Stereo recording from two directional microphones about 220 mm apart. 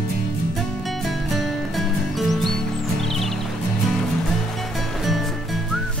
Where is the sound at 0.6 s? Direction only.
Centre (ahead or behind).